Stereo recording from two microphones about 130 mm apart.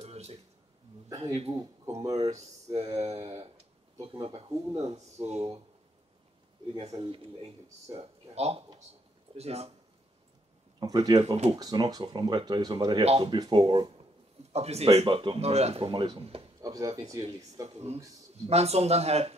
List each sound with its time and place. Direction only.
0.0 s a sound: 55° right (ahead or behind)
1.0 s a sound: 25° right (ahead or behind)
2.0 s speech: 30° right (ahead or behind)
2.9 s speech: 50° right (ahead or behind)
4.5 s speech: 25° right (ahead or behind)
4.8 s speech: 60° right (ahead or behind)
6.8 s speech: 45° right (ahead or behind)
10.8 s speech: 30° right (ahead or behind)
11.1 s speech: 50° right (ahead or behind)
11.5 s speech: 30° right (ahead or behind)
14.5 s speech: 55° right (ahead or behind)
16.6 s speech: 30° right (ahead or behind)
17.7 s speech: 55° right (ahead or behind)